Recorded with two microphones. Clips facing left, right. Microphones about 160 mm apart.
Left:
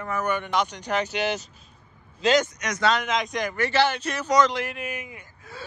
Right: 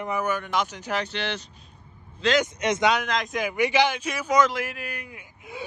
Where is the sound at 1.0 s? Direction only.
10° left (ahead or behind).